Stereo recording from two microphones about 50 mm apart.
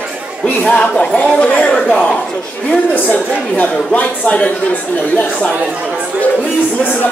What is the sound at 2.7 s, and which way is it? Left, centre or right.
A woman's voice, left.